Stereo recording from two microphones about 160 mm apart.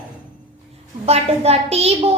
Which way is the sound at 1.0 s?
40° right (ahead or behind).